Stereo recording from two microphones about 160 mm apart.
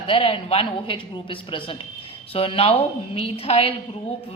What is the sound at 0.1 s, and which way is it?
A woman's voice, 35° left (ahead or behind).